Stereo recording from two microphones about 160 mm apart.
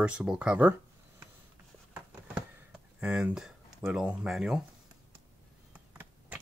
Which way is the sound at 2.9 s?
10° right (ahead or behind).